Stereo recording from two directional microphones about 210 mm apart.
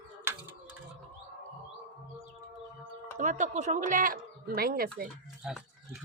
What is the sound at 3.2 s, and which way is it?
Speech, 35° right (ahead or behind).